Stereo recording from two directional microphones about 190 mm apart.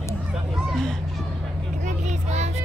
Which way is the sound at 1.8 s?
40° right (ahead or behind).